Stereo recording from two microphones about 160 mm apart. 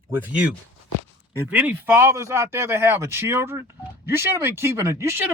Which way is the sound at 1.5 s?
10° right (ahead or behind).